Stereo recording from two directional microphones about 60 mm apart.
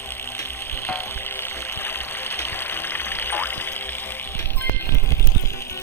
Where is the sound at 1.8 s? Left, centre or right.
Left.